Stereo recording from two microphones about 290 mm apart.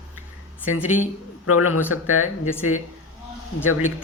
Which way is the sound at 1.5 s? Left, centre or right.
Left.